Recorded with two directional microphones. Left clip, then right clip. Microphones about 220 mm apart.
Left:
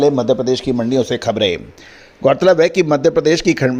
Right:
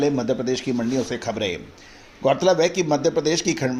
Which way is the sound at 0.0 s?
30° left (ahead or behind).